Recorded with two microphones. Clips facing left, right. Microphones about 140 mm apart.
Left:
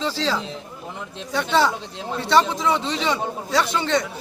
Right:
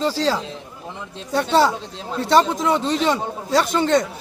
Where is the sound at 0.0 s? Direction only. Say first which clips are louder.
Right 3 dB; 40° right (ahead or behind).